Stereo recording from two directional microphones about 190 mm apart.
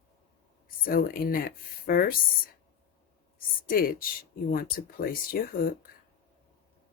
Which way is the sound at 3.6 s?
50° left (ahead or behind).